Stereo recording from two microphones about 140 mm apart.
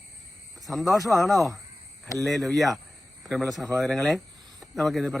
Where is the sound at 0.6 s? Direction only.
Centre (ahead or behind).